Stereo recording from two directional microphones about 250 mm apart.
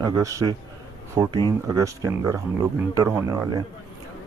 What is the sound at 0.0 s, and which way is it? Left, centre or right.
Speech, centre.